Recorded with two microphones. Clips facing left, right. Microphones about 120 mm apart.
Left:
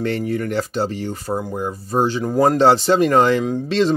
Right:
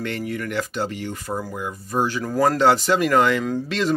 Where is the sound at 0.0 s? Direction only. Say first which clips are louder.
Left 6 dB; 35° left (ahead or behind).